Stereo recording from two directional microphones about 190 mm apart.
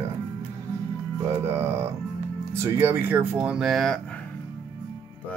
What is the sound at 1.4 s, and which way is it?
Speech, 15° right (ahead or behind).